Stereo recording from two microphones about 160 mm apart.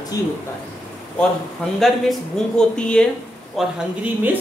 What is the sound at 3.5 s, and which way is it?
Speech, 10° right (ahead or behind).